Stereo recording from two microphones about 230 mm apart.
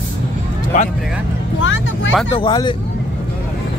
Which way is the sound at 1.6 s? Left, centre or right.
Left.